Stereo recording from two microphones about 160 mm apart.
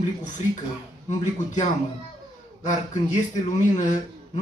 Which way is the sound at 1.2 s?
50° left (ahead or behind).